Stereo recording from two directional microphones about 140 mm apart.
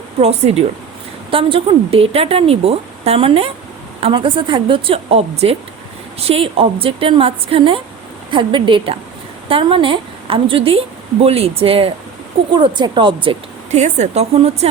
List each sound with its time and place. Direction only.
0.2 s a woman's voice: 50° right (ahead or behind)
13.7 s speech: 55° right (ahead or behind)